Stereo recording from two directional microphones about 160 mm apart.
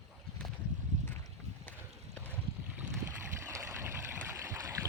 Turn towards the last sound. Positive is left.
turn(degrees=-20)  # may be behind; listen again after turning